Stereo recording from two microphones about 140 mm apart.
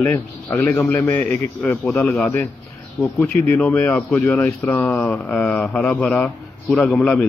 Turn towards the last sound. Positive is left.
turn(degrees=0)  # may be behind; listen again after turning